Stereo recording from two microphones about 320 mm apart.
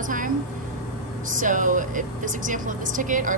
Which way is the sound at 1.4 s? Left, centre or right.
Right.